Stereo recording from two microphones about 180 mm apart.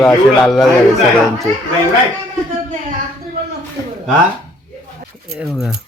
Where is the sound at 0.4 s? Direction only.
Centre (ahead or behind).